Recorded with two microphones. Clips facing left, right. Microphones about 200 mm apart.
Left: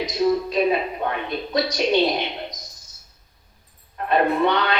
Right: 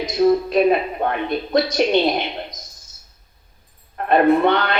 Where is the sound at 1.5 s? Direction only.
50° right (ahead or behind).